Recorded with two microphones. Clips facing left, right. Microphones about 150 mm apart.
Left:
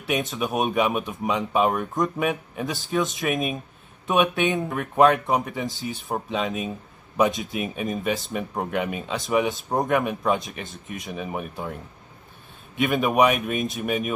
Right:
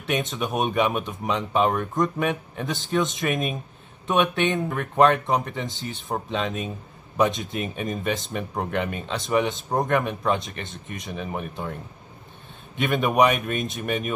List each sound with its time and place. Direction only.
0.0 s speech: centre (ahead or behind)